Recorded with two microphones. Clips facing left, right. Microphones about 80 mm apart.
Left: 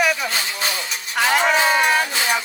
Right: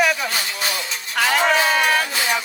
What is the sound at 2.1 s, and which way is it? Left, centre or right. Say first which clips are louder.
Music: left 1 dB; left.